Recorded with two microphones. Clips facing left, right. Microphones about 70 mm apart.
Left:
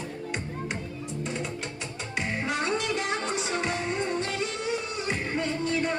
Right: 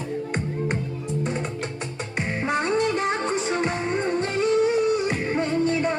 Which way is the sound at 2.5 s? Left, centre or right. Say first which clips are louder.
Right 7 dB; right.